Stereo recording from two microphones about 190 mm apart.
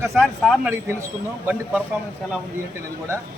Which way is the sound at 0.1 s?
Centre (ahead or behind).